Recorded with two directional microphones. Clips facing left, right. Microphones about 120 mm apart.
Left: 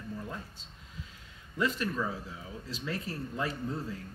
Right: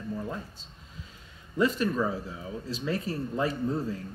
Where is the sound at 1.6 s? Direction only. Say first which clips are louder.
Right 6 dB; 30° right (ahead or behind).